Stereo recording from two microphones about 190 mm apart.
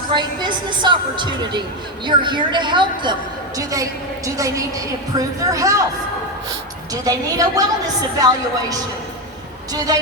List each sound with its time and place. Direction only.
0.1 s a woman's voice: 25° right (ahead or behind)
6.9 s a woman's voice: 20° right (ahead or behind)
9.7 s a woman's voice: 20° right (ahead or behind)